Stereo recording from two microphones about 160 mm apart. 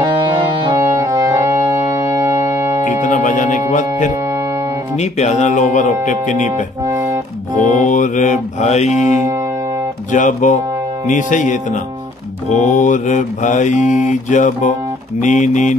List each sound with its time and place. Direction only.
0.0 s music: 30° right (ahead or behind)
0.7 s music: 20° right (ahead or behind)
3.0 s music: 55° left (ahead or behind)
4.9 s mantra: 45° left (ahead or behind)
7.5 s mantra: 50° left (ahead or behind)
10.1 s mantra: 50° left (ahead or behind)